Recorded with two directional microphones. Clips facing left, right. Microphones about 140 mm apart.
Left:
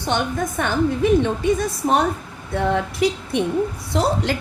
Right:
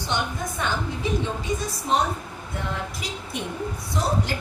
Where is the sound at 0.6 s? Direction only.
60° left (ahead or behind).